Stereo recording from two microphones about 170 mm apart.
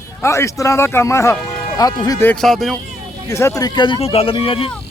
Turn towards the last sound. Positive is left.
turn(degrees=30)  # may be behind; listen again after turning